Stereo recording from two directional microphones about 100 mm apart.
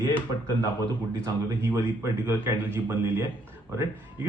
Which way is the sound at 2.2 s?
25° right (ahead or behind).